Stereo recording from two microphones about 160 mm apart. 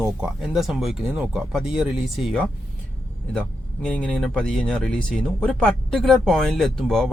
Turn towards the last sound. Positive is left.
turn(degrees=0)  # may be behind; listen again after turning